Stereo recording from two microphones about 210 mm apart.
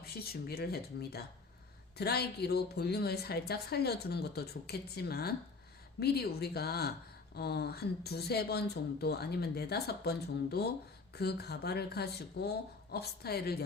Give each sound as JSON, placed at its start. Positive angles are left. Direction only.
{"t": 0.0, "sound": "a woman's voice", "side_deg": 45}